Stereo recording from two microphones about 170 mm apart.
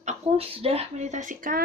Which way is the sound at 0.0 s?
40° right (ahead or behind).